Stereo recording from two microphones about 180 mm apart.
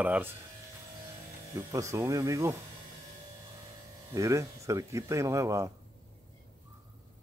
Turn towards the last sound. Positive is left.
turn(degrees=-15)  # may be behind; listen again after turning